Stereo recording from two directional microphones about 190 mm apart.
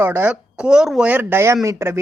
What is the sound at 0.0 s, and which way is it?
A woman's voice, 10° right (ahead or behind).